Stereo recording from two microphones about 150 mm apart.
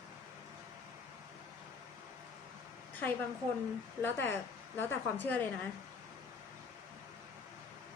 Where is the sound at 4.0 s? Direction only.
15° left (ahead or behind).